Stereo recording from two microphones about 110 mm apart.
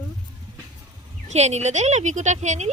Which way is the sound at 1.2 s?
90° right.